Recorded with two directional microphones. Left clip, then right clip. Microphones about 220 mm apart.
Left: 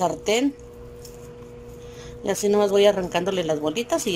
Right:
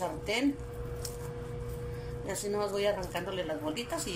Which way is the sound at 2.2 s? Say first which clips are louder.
Left 13 dB; 45° left (ahead or behind).